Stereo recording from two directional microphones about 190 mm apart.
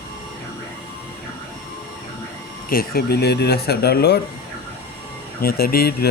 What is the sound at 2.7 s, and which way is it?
Speech, 50° left (ahead or behind).